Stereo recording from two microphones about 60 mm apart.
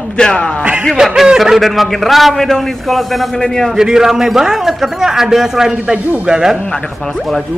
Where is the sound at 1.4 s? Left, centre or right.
Centre.